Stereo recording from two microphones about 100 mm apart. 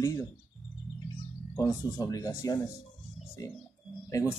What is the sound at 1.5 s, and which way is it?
Speech, 35° left (ahead or behind).